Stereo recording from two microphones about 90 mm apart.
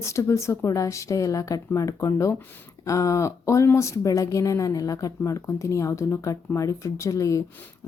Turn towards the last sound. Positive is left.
turn(degrees=40)  # may be behind; listen again after turning